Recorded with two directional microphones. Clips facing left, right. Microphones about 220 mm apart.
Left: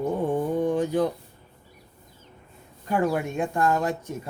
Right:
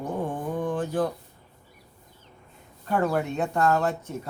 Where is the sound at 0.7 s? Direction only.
15° left (ahead or behind).